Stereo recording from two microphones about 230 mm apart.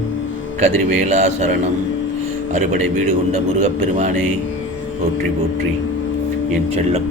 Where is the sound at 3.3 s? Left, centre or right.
Right.